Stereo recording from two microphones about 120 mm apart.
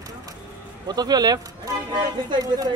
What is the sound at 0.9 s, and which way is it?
Speech, 35° right (ahead or behind).